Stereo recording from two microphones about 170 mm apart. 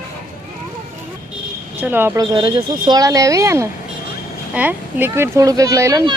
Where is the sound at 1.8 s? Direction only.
10° right (ahead or behind).